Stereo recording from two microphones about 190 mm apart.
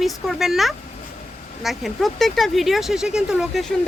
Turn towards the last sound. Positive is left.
turn(degrees=0)  # may be behind; listen again after turning